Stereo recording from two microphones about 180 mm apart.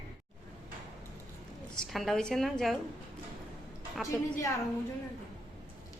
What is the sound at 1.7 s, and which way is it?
A woman's voice, centre (ahead or behind).